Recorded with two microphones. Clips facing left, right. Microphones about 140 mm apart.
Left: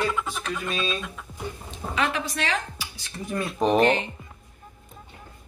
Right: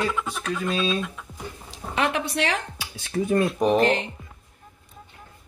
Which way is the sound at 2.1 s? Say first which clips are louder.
Right 3 dB; 65° right (ahead or behind).